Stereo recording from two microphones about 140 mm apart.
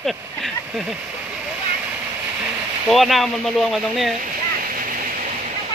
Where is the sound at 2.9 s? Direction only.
Centre (ahead or behind).